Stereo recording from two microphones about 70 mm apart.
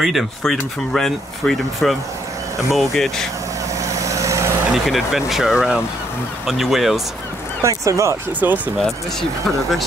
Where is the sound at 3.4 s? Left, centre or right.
Right.